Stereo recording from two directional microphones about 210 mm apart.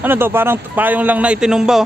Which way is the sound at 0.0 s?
10° right (ahead or behind).